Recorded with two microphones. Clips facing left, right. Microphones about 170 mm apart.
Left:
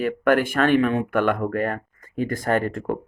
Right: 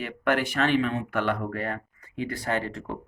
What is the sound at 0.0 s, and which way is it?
Speech, 50° left (ahead or behind).